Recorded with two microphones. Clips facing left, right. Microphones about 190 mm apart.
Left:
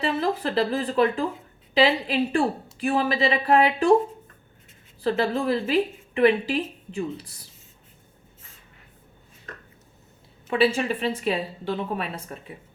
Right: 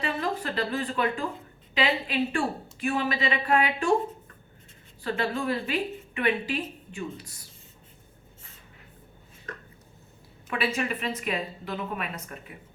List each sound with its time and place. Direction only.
0.0 s speech: 35° left (ahead or behind)
5.0 s speech: 35° left (ahead or behind)
10.5 s a woman's voice: 30° left (ahead or behind)